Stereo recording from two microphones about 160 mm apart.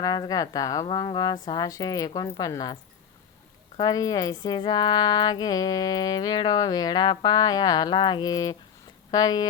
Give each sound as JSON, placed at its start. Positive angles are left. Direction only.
{"t": 0.0, "sound": "speech", "side_deg": 25}
{"t": 3.8, "sound": "speech", "side_deg": 20}